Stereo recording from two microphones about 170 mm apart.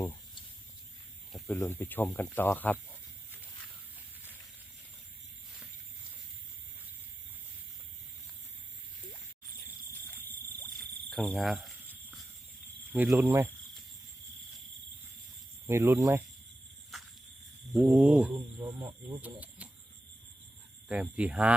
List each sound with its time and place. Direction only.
1.3 s speech: 10° left (ahead or behind)
10.8 s a sound: 5° left (ahead or behind)
12.9 s speech: 10° right (ahead or behind)
15.6 s speech: 15° right (ahead or behind)
17.7 s speech: 10° right (ahead or behind)
18.3 s speech: 20° right (ahead or behind)
19.2 s speech: 10° right (ahead or behind)
20.8 s speech: 5° right (ahead or behind)